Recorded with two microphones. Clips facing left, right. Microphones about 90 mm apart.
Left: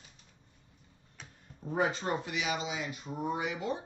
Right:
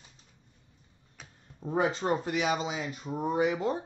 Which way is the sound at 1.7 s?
25° right (ahead or behind).